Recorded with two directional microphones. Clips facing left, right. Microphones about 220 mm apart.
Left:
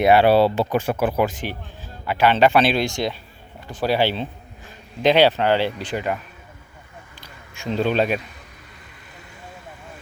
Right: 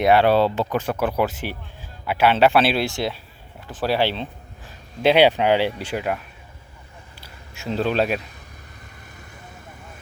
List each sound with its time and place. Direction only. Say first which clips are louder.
0.0 s speech: left 2 dB; 5° left (ahead or behind)
5.0 s speech: even; 10° right (ahead or behind)
7.2 s speech: left 1 dB; 5° right (ahead or behind)